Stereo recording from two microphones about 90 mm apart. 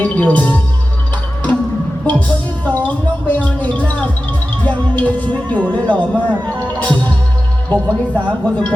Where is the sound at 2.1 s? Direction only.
15° left (ahead or behind).